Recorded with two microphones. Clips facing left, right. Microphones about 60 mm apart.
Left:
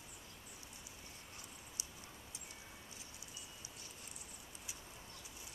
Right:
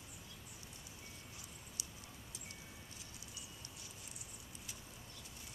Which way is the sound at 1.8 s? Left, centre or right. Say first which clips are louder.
Right 1 dB; left.